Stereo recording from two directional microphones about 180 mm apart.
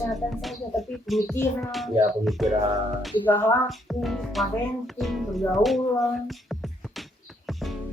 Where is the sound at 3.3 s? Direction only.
10° left (ahead or behind).